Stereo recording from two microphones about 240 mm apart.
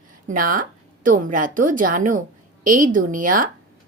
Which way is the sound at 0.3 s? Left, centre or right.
Right.